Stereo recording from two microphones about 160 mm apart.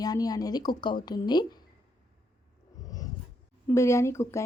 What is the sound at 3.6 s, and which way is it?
Speech, 15° left (ahead or behind).